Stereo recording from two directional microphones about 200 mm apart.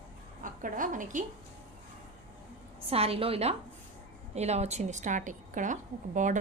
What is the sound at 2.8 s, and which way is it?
A woman's voice, 30° right (ahead or behind).